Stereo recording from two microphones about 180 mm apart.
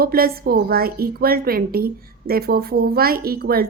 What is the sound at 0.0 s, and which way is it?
A woman's voice, 55° right (ahead or behind).